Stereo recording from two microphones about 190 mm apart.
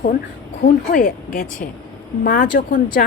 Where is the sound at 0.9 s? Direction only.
45° left (ahead or behind).